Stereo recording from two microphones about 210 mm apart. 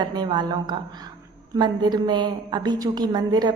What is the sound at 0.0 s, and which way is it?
A woman's voice, 20° right (ahead or behind).